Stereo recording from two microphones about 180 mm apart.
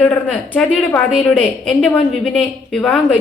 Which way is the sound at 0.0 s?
5° left (ahead or behind).